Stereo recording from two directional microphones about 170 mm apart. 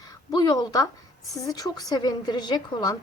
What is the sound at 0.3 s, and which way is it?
A woman's voice, 25° left (ahead or behind).